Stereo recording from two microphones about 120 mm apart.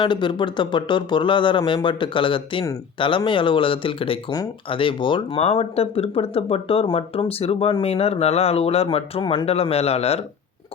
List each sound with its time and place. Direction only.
0.0 s speech: 40° left (ahead or behind)
9.2 s speech: 35° left (ahead or behind)
9.5 s speech: 55° left (ahead or behind)